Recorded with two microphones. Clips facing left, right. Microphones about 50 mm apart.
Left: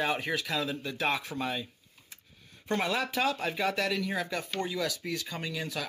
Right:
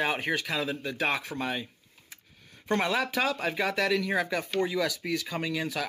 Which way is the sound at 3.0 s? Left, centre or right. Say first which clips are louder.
Right 1 dB; right.